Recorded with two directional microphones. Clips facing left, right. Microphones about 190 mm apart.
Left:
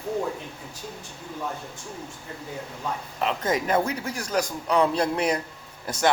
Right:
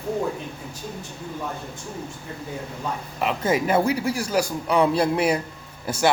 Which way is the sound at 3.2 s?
10° right (ahead or behind).